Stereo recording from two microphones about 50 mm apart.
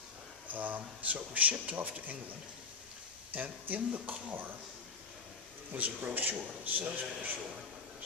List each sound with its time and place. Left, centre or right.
0.4 s speech: right
3.3 s speech: right
5.7 s speech: right